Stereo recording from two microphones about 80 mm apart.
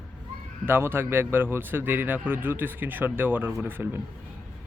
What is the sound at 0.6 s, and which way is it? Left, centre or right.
A man's voice, right.